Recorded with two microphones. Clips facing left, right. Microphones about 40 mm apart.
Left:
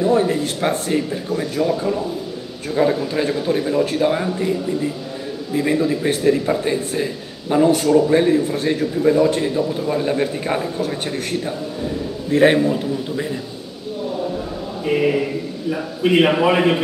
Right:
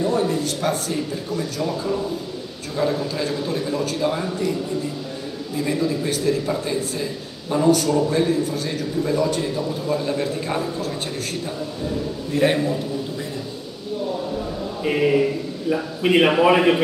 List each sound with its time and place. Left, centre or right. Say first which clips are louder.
0.0 s speech: left 4 dB; left
2.7 s speech: left 5 dB; left
16.0 s a man's voice: left 1 dB; centre